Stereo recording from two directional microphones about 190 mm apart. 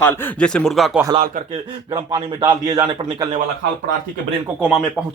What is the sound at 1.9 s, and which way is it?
Speech, 25° right (ahead or behind).